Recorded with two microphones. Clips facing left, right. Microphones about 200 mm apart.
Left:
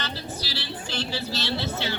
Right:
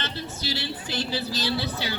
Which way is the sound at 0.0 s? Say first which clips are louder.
Right 1 dB; 20° right (ahead or behind).